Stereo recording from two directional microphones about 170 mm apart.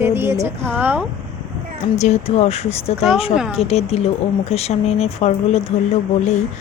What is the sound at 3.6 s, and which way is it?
A woman's voice, 35° left (ahead or behind).